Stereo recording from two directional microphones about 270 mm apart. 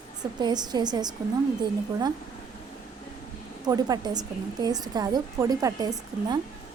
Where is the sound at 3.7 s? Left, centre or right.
Centre.